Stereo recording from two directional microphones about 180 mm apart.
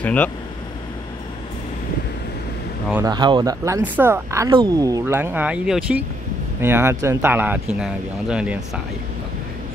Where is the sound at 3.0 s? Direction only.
25° right (ahead or behind); by 8.6 s 5° right (ahead or behind).